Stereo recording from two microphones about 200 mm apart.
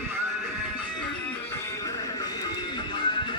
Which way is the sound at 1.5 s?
15° left (ahead or behind).